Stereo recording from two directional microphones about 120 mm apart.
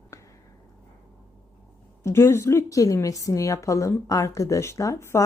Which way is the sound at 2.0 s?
20° left (ahead or behind).